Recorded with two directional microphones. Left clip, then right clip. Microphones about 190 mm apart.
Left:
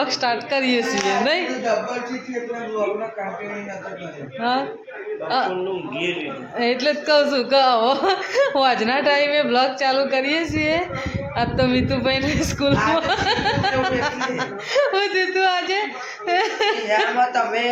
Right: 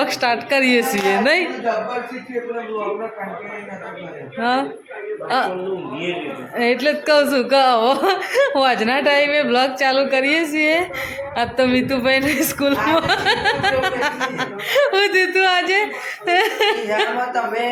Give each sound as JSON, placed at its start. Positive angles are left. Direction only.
{"t": 0.0, "sound": "a woman's voice", "side_deg": -15}
{"t": 4.4, "sound": "a woman's voice", "side_deg": -15}
{"t": 6.6, "sound": "a woman's voice", "side_deg": -10}